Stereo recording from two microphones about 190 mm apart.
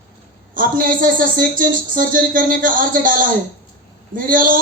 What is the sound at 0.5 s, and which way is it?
A man's voice, 45° right (ahead or behind).